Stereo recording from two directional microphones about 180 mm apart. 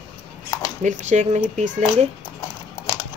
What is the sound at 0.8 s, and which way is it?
Speech, 40° right (ahead or behind).